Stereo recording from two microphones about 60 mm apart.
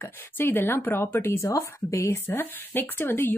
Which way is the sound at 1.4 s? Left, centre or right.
Left.